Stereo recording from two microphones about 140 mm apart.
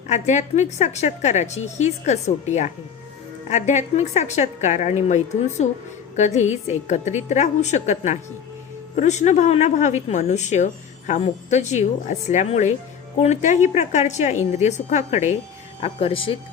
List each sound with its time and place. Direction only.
0.1 s a woman's voice: 55° left (ahead or behind)
15.8 s speech: 45° left (ahead or behind)